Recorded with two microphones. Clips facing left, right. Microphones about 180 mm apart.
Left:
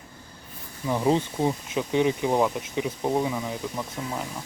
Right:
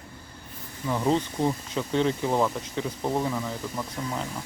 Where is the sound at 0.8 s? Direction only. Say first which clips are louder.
Left 2 dB; 15° left (ahead or behind).